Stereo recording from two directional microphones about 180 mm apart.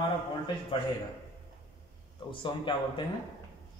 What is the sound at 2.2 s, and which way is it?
Speech, 25° left (ahead or behind).